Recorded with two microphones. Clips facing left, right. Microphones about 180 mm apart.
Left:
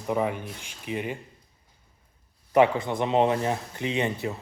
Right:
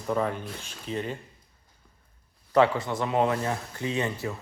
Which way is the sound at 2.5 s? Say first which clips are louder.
Left 1 dB; 15° left (ahead or behind).